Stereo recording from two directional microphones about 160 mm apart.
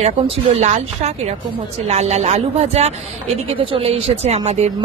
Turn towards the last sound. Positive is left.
turn(degrees=-40)  # may be behind; listen again after turning